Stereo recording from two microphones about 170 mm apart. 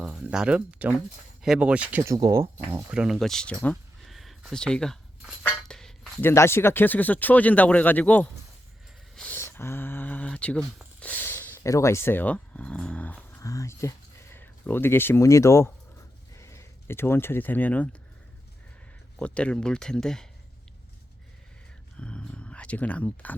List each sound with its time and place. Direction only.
0.0 s speech: 5° right (ahead or behind)
6.3 s speech: 15° left (ahead or behind)
19.2 s speech: 5° left (ahead or behind)
21.9 s speech: 5° left (ahead or behind)